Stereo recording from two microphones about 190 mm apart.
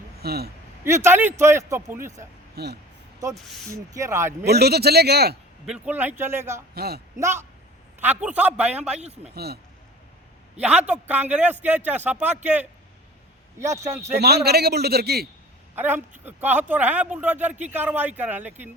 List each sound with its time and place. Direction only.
0.2 s speech: 60° right (ahead or behind)
0.9 s speech: 15° right (ahead or behind)
2.6 s a man's voice: 55° right (ahead or behind)
3.3 s speech: centre (ahead or behind)
3.7 s speech: 15° right (ahead or behind)
4.4 s a man's voice: 60° right (ahead or behind)
5.6 s speech: 5° right (ahead or behind)
6.7 s a man's voice: 55° right (ahead or behind)
7.2 s speech: 15° right (ahead or behind)
9.3 s a man's voice: 55° right (ahead or behind)
10.8 s speech: 10° right (ahead or behind)
14.1 s a man's voice: 60° right (ahead or behind)
15.7 s speech: 10° right (ahead or behind)